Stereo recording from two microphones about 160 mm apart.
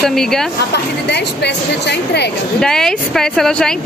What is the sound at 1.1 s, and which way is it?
Speech, 90° left.